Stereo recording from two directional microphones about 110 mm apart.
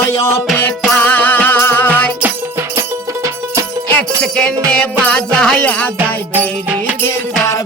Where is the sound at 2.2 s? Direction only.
25° right (ahead or behind).